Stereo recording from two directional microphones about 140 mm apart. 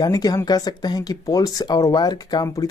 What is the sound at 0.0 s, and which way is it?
Speech, 25° left (ahead or behind).